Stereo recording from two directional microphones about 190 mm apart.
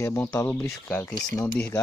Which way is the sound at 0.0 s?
10° left (ahead or behind).